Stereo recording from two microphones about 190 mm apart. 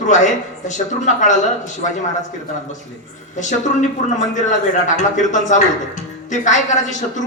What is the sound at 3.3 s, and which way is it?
Speech, 40° left (ahead or behind).